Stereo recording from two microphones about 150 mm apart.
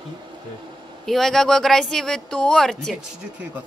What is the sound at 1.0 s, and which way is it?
Speech, centre (ahead or behind).